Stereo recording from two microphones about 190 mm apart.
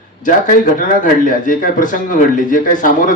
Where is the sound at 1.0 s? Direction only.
45° left (ahead or behind).